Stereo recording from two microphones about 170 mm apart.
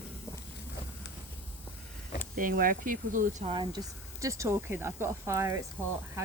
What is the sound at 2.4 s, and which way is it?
Speech, 55° right (ahead or behind).